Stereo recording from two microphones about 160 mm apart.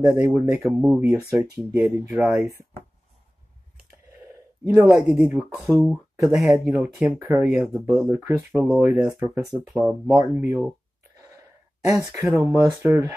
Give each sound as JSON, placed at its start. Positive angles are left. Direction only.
{"t": 0.1, "sound": "speech", "side_deg": -10}
{"t": 4.6, "sound": "speech", "side_deg": -15}
{"t": 5.3, "sound": "speech", "side_deg": -5}
{"t": 6.2, "sound": "speech", "side_deg": -15}
{"t": 7.8, "sound": "speech", "side_deg": -20}
{"t": 11.3, "sound": "sigh", "side_deg": -20}
{"t": 12.5, "sound": "speech", "side_deg": -15}